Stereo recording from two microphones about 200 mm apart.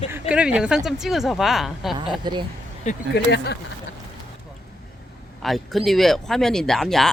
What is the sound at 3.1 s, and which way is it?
Speech, 55° left (ahead or behind).